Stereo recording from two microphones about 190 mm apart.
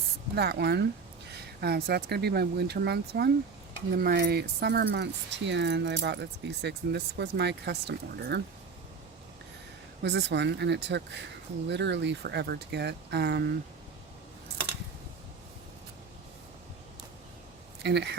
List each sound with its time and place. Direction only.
0.3 s speech: 55° right (ahead or behind)
10.0 s speech: 65° right (ahead or behind)
17.8 s speech: 60° right (ahead or behind)